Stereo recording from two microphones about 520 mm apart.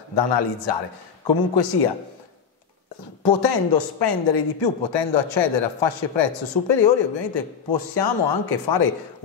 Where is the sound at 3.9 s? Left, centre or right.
Left.